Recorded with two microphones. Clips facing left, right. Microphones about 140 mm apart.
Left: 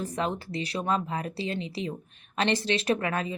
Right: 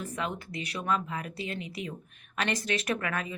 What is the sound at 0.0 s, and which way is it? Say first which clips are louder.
A woman's voice: left 4 dB; 35° left (ahead or behind).